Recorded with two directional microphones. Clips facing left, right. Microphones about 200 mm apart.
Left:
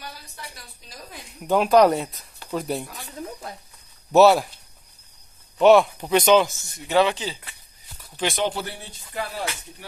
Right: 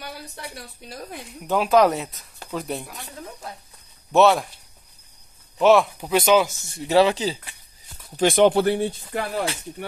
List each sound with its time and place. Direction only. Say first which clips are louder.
0.4 s speech: right 5 dB; 60° right (ahead or behind)
1.4 s speech: left 1 dB; centre (ahead or behind)
4.1 s speech: left 2 dB; 5° left (ahead or behind)
5.6 s speech: left 2 dB; centre (ahead or behind)
6.7 s speech: right 3 dB; 35° right (ahead or behind)
8.2 s speech: right 9 dB; 55° right (ahead or behind)